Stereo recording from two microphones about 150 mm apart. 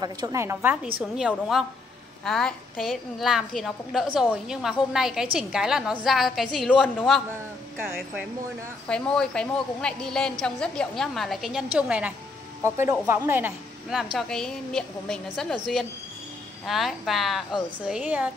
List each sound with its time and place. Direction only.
0.0 s a woman's voice: 25° right (ahead or behind)
1.1 s a woman's voice: centre (ahead or behind)
7.7 s speech: 10° right (ahead or behind)
8.8 s a woman's voice: 5° left (ahead or behind); by 13.5 s 15° right (ahead or behind)
14.1 s a woman's voice: 5° left (ahead or behind)